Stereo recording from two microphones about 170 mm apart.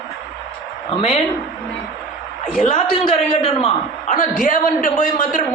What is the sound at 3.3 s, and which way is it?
Speech, 30° left (ahead or behind).